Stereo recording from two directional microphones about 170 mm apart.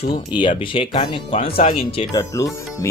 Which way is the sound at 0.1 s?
30° left (ahead or behind).